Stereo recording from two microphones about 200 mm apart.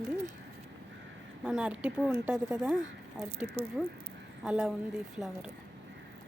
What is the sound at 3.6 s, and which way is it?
Speech, 30° right (ahead or behind).